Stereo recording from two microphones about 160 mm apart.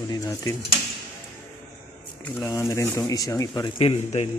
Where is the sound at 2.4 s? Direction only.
20° left (ahead or behind).